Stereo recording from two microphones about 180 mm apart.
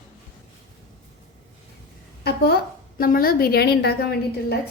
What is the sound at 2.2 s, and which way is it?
A woman's voice, 60° left (ahead or behind).